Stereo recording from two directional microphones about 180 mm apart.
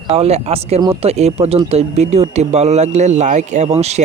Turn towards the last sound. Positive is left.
turn(degrees=-40)  # may be behind; listen again after turning